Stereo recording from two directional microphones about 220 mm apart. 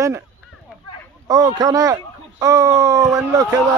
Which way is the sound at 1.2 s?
15° right (ahead or behind).